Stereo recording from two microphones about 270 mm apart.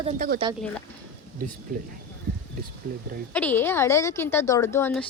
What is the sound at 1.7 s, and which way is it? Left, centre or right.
Speech, right.